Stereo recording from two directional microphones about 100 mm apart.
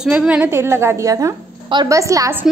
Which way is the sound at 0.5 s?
25° right (ahead or behind).